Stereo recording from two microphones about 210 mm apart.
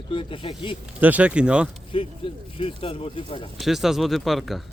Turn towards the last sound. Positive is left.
turn(degrees=0)  # may be behind; listen again after turning